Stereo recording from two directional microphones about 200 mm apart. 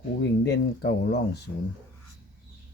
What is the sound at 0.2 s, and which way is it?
Speech, 60° left (ahead or behind).